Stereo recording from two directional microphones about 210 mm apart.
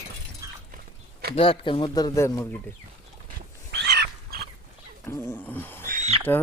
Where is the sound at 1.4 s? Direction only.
25° left (ahead or behind).